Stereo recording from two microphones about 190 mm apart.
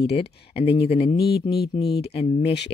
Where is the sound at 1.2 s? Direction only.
55° left (ahead or behind).